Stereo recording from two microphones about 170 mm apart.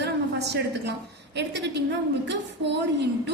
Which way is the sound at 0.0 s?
90° right.